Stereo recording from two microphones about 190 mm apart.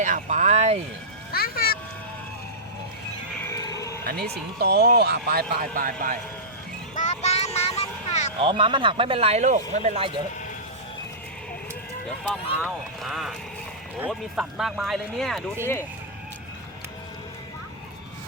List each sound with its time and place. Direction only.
0.0 s speech: 40° right (ahead or behind)
1.3 s a child's voice: 55° left (ahead or behind)
3.4 s a sound: 20° left (ahead or behind)
4.6 s speech: 60° right (ahead or behind)
6.9 s vehicle: 40° left (ahead or behind)
8.4 s a man's voice: 25° right (ahead or behind)
12.0 s speech: 5° left (ahead or behind)